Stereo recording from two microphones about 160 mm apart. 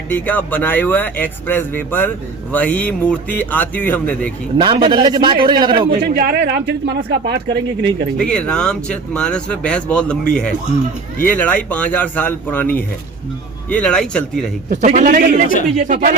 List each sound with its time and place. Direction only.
0.1 s speech: 10° left (ahead or behind)
4.5 s a man's voice: 30° right (ahead or behind)
5.9 s speech: 70° right (ahead or behind); by 7.9 s 90° right
8.2 s speech: 5° left (ahead or behind)
14.7 s a man's voice: 50° right (ahead or behind)